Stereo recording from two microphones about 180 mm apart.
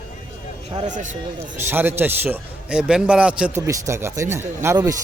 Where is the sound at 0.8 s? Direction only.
45° right (ahead or behind).